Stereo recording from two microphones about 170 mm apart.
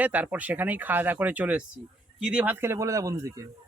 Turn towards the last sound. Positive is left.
turn(degrees=-20)  # may be behind; listen again after turning